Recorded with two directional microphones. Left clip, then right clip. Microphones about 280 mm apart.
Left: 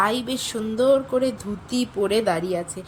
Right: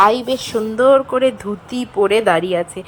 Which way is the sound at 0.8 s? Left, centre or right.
Right.